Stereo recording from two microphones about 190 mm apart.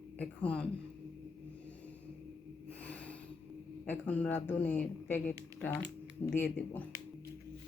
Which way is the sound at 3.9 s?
10° left (ahead or behind).